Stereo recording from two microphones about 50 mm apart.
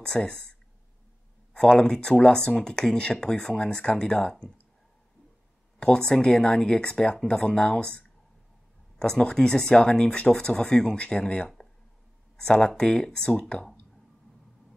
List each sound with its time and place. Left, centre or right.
0.0 s speech: centre
5.8 s speech: centre
8.9 s a sound: centre
9.3 s speech: centre